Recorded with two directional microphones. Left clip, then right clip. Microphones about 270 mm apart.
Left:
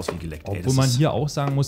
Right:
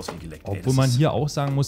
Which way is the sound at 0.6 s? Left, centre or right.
Centre.